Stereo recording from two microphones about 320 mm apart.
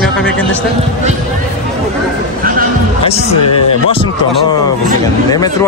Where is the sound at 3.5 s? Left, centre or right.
Left.